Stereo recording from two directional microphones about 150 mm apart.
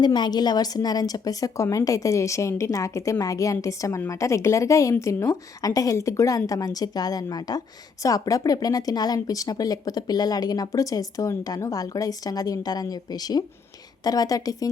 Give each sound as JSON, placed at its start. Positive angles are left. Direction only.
{"t": 0.0, "sound": "a woman's voice", "side_deg": 30}